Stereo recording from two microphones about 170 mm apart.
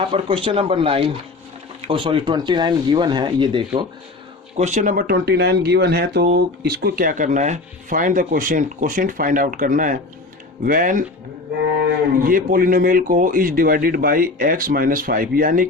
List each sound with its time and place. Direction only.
0.0 s speech: 30° right (ahead or behind)
4.5 s speech: 45° right (ahead or behind)